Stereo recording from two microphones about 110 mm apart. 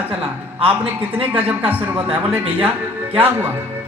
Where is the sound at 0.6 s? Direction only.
15° right (ahead or behind).